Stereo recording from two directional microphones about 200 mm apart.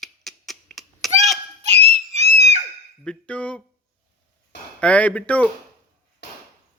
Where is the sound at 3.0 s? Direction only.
5° left (ahead or behind).